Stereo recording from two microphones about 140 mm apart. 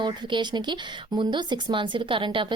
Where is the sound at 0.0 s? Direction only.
35° right (ahead or behind).